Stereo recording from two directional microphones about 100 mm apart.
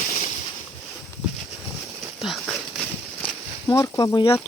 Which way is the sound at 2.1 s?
Centre (ahead or behind).